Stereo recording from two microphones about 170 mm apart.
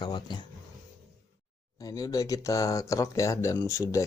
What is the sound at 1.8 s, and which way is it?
Speech, 20° left (ahead or behind).